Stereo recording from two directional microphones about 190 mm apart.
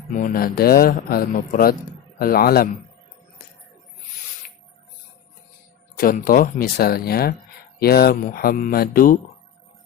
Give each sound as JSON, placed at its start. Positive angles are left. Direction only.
{"t": 0.1, "sound": "speech", "side_deg": 45}
{"t": 6.0, "sound": "speech", "side_deg": 50}